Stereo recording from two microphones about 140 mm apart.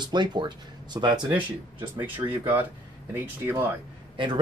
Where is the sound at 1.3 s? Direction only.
15° right (ahead or behind).